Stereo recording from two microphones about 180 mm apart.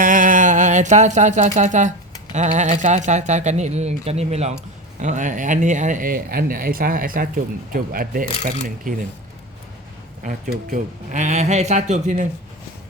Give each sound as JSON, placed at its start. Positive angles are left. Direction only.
{"t": 0.0, "sound": "a sound", "side_deg": -50}
{"t": 2.3, "sound": "speech", "side_deg": -40}
{"t": 10.2, "sound": "speech", "side_deg": -50}